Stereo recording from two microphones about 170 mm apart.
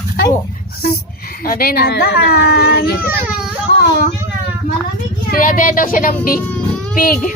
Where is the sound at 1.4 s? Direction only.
60° left (ahead or behind).